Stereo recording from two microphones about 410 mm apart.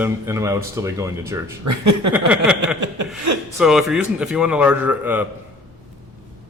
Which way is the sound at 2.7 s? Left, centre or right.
Right.